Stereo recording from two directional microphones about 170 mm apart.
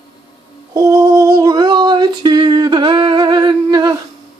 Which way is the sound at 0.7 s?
20° right (ahead or behind).